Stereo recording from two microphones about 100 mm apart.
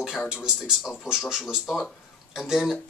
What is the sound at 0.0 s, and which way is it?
Speech, 5° right (ahead or behind).